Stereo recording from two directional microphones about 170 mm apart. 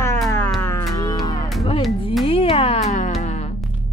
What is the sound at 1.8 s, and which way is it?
Music, centre (ahead or behind).